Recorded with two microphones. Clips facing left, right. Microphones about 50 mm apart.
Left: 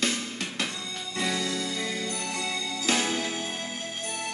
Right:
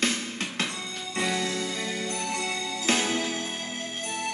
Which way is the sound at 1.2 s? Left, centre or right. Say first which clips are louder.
Right 1 dB; right.